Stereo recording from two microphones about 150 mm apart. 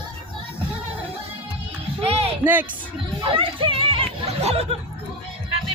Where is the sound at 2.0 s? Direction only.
40° right (ahead or behind).